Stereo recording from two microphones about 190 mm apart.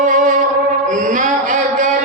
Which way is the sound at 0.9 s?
40° right (ahead or behind).